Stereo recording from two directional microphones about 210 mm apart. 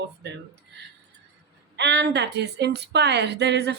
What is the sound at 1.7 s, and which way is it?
A woman's voice, 55° right (ahead or behind).